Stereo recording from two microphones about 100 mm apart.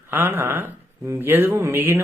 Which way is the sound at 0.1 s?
25° right (ahead or behind).